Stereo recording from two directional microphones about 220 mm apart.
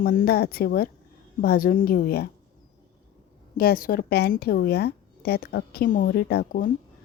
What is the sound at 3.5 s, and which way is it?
A woman's voice, 45° left (ahead or behind).